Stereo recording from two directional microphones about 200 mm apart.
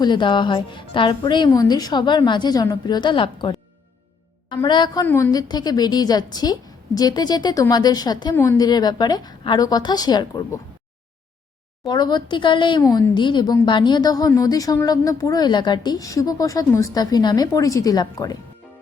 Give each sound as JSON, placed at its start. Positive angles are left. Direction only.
{"t": 0.0, "sound": "speech", "side_deg": 25}
{"t": 11.9, "sound": "speech", "side_deg": 20}